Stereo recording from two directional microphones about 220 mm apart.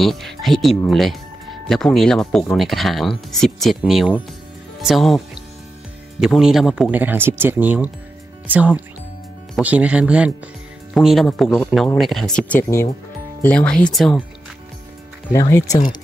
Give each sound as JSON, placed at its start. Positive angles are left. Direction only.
{"t": 0.0, "sound": "speech", "side_deg": 0}
{"t": 15.3, "sound": "speech", "side_deg": 15}